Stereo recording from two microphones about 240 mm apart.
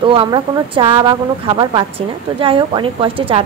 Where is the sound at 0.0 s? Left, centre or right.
Right.